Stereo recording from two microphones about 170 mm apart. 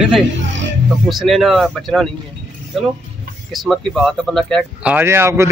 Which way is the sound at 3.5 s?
Centre (ahead or behind).